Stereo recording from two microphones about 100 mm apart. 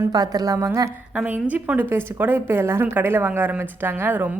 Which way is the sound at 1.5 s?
15° right (ahead or behind).